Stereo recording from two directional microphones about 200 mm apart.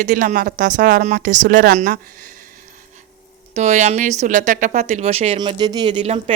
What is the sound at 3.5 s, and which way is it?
Speech, 35° right (ahead or behind).